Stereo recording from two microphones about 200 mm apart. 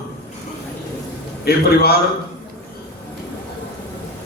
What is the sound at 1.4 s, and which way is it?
Speech, 50° left (ahead or behind).